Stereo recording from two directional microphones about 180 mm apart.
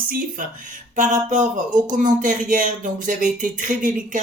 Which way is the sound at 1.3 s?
45° right (ahead or behind).